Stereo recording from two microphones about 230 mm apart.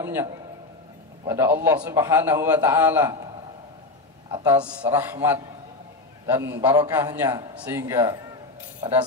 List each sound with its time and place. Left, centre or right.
0.0 s a man's voice: centre
4.5 s a man's voice: centre